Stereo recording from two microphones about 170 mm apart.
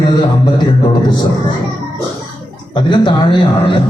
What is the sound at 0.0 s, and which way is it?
Music, 25° left (ahead or behind).